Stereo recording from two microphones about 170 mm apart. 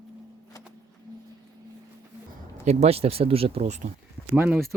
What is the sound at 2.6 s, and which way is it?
Speech, 35° right (ahead or behind).